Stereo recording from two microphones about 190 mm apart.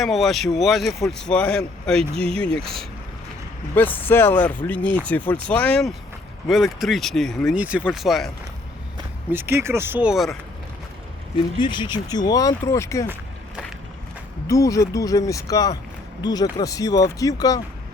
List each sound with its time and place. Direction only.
0.0 s speech: centre (ahead or behind)
9.3 s speech: 10° right (ahead or behind)
11.6 s speech: 25° left (ahead or behind)
14.4 s speech: 20° left (ahead or behind)